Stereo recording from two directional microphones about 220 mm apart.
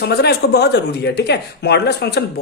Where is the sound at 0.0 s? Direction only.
50° left (ahead or behind).